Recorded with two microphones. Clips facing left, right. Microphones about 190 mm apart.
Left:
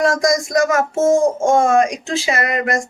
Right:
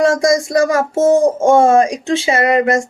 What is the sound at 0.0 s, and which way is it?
Speech, 30° right (ahead or behind).